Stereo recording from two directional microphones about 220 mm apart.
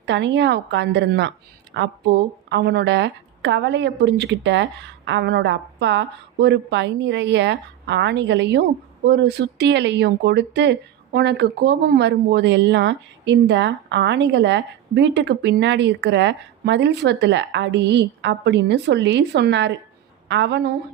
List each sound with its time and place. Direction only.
0.0 s speech: 55° right (ahead or behind)